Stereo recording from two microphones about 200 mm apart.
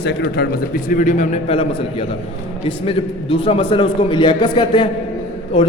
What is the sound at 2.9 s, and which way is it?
A man's voice, 25° left (ahead or behind).